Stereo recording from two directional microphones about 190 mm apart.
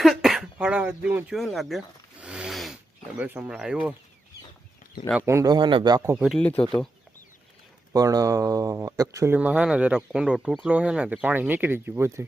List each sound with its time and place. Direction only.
0.0 s throat clearing: centre (ahead or behind)
3.2 s speech: 10° right (ahead or behind)
5.1 s speech: 15° right (ahead or behind)
6.1 s speech: centre (ahead or behind)
7.9 s speech: 20° right (ahead or behind)